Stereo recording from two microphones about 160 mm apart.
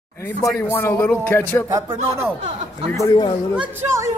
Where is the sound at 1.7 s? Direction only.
20° right (ahead or behind).